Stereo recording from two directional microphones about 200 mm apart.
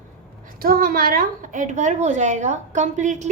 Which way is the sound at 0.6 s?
45° right (ahead or behind).